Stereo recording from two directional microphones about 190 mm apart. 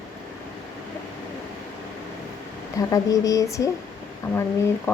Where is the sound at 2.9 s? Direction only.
20° left (ahead or behind).